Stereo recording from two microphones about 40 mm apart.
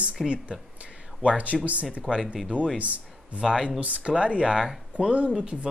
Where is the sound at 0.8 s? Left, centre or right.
Right.